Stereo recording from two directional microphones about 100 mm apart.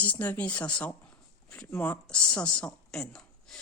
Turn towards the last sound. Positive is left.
turn(degrees=5)  # may be behind; listen again after turning